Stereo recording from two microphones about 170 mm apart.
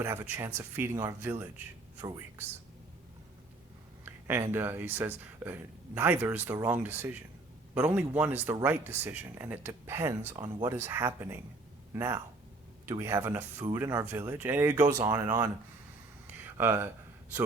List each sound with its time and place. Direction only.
0.0 s speech: 15° right (ahead or behind)
4.0 s speech: 15° right (ahead or behind)